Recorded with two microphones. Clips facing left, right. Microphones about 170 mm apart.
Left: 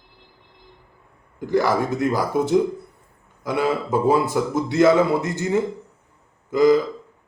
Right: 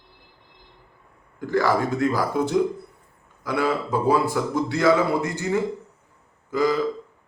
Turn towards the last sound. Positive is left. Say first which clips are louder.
# left 6 dB
turn(degrees=20)  # may be behind; listen again after turning